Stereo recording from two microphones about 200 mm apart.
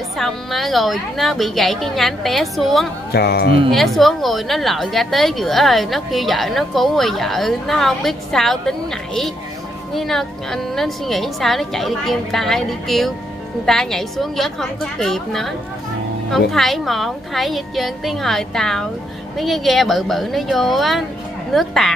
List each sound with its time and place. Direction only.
0.2 s a woman's voice: centre (ahead or behind)
3.1 s speech: 55° left (ahead or behind)
3.7 s a woman's voice: centre (ahead or behind)